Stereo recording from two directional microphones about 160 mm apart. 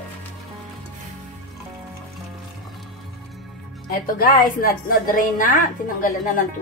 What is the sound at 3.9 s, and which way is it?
A woman's voice, 60° left (ahead or behind).